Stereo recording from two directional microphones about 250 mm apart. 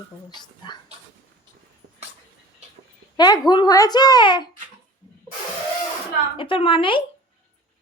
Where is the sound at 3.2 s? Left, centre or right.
Centre.